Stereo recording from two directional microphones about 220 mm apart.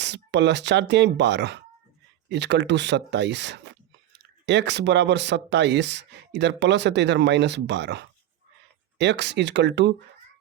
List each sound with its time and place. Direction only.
0.0 s speech: 50° right (ahead or behind)